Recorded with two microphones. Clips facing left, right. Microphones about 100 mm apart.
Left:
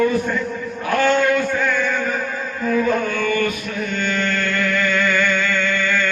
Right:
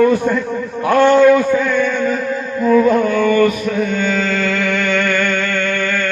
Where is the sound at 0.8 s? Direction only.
90° right.